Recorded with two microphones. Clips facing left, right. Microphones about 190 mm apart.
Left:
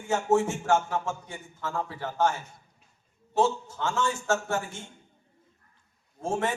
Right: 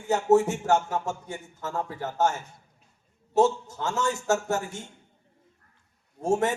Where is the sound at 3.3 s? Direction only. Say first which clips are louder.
Right 3 dB; 40° right (ahead or behind).